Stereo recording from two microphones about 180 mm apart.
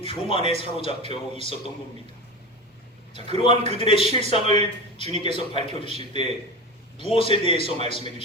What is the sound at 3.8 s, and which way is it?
Speech, 30° left (ahead or behind).